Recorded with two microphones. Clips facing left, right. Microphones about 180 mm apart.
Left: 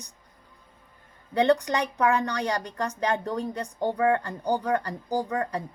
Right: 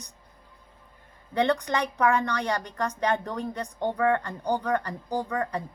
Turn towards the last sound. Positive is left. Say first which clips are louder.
# left 1 dB
turn(degrees=35)  # may be behind; listen again after turning